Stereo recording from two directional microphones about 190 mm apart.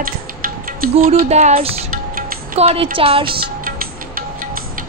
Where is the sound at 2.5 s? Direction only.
35° right (ahead or behind).